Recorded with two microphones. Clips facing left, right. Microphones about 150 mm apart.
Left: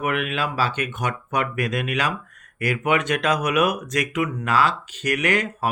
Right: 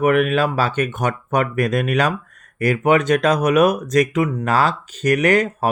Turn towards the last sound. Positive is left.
turn(degrees=-45)  # may be behind; listen again after turning